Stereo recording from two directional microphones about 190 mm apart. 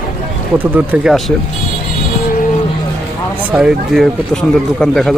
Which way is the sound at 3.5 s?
5° right (ahead or behind).